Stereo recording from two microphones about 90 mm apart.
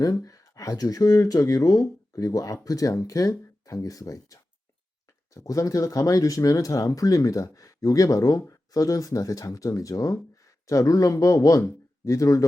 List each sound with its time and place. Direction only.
0.0 s speech: 40° left (ahead or behind)